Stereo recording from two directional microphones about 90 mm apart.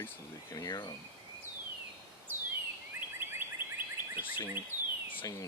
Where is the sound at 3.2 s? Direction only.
25° right (ahead or behind).